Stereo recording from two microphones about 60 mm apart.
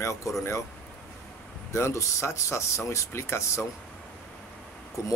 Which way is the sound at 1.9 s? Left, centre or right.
Left.